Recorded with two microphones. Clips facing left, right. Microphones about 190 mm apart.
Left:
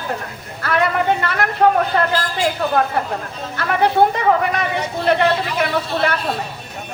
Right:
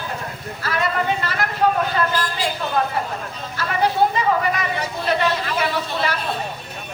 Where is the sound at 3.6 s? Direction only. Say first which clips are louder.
Left 4 dB; 60° left (ahead or behind).